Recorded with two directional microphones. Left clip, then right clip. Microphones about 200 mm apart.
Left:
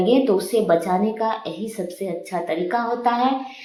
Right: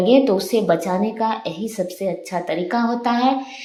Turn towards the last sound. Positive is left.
turn(degrees=-35)  # may be behind; listen again after turning